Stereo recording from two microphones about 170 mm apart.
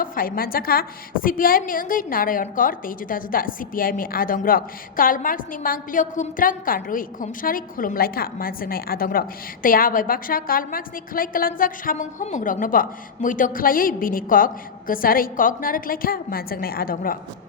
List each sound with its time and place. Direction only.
0.0 s a woman's voice: 55° left (ahead or behind)